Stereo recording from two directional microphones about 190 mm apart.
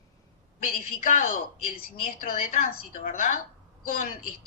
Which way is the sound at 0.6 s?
40° left (ahead or behind).